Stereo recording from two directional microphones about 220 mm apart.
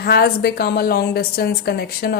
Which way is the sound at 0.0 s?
45° left (ahead or behind).